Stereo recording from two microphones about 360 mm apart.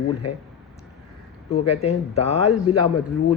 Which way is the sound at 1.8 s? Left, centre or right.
Centre.